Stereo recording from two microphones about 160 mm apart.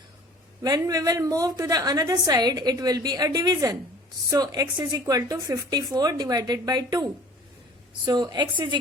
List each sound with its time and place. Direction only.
0.6 s a woman's voice: 25° right (ahead or behind)